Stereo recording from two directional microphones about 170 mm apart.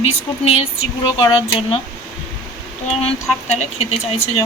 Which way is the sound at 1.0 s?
30° left (ahead or behind).